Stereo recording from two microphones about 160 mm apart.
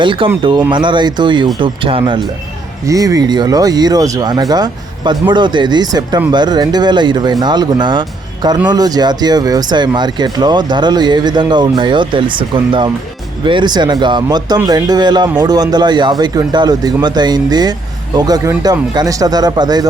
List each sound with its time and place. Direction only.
0.0 s speech: 30° right (ahead or behind)
2.8 s speech: 20° right (ahead or behind)